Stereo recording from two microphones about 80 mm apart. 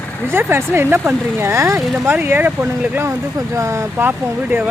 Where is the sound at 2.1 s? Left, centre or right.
Right.